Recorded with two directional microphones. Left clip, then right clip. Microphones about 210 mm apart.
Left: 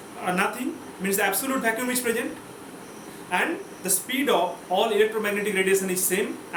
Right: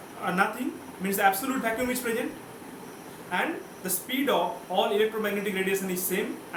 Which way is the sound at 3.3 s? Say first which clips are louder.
Left 4 dB; 15° right (ahead or behind).